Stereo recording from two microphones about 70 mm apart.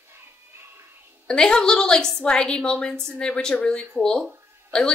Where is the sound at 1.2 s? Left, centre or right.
Centre.